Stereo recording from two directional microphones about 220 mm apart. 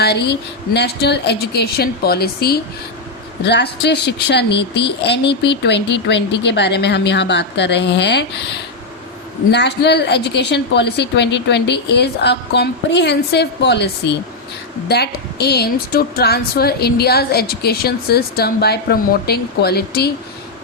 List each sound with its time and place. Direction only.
0.0 s a woman's voice: 50° left (ahead or behind)
9.5 s a woman's voice: 50° left (ahead or behind)